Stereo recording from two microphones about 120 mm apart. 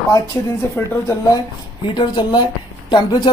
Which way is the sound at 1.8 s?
45° left (ahead or behind).